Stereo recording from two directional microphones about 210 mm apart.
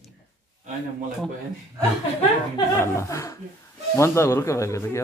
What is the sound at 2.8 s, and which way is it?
A man's voice, 15° left (ahead or behind).